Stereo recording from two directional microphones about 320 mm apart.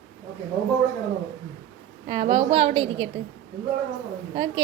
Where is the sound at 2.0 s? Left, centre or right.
Centre.